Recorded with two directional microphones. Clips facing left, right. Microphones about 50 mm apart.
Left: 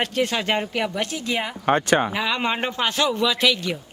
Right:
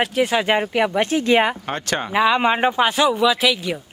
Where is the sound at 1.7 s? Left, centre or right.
Centre.